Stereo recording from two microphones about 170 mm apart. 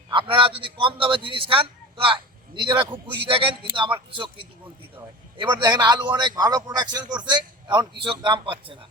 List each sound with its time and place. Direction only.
0.1 s a man's voice: 30° right (ahead or behind)